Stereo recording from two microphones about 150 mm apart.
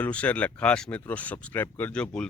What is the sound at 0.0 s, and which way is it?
Speech, 10° left (ahead or behind).